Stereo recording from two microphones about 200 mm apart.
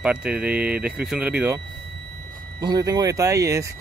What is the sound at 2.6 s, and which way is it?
Speech, 20° right (ahead or behind).